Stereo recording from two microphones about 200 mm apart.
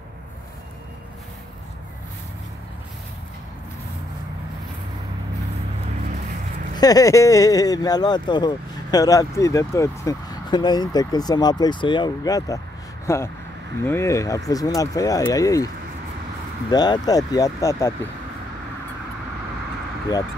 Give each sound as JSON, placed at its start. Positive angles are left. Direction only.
{"t": 6.7, "sound": "speech", "side_deg": 20}
{"t": 16.7, "sound": "speech", "side_deg": 20}